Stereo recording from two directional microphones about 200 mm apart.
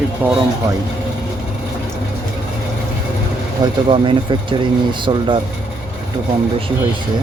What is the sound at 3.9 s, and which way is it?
Speech, 25° right (ahead or behind).